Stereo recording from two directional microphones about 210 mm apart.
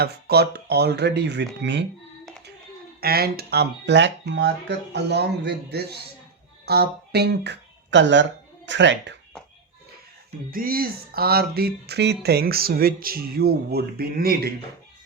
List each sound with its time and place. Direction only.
0.0 s speech: 50° right (ahead or behind)
3.0 s speech: 45° right (ahead or behind)
10.5 s speech: 45° right (ahead or behind)